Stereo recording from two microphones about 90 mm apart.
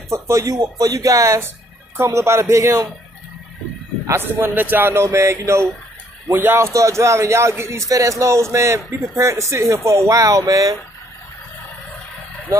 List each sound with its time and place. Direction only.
0.1 s a man's voice: 35° right (ahead or behind)
4.4 s a man's voice: 20° right (ahead or behind); by 10.8 s 40° right (ahead or behind)